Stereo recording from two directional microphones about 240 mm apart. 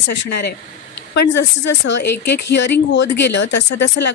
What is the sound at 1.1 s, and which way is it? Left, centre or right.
Speech, left.